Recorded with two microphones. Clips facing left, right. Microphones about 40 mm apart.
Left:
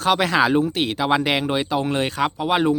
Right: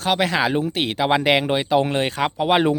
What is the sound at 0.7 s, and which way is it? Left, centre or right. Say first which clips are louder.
Speech: even; right.